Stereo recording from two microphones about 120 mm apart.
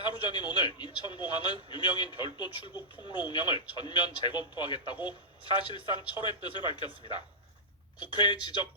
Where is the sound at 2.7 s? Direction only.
15° right (ahead or behind).